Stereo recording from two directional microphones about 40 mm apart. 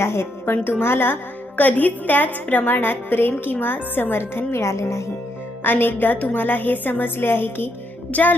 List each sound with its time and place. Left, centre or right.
0.0 s a woman's voice: left
1.5 s a woman's voice: left
4.2 s a woman's voice: left
5.6 s a woman's voice: left
7.0 s a woman's voice: left
8.1 s a woman's voice: left